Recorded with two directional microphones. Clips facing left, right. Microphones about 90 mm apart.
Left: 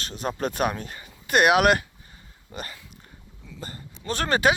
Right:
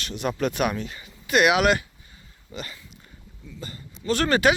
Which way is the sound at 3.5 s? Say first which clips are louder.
Even; 40° left (ahead or behind).